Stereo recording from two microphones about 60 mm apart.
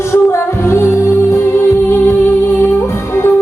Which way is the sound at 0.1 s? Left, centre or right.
Left.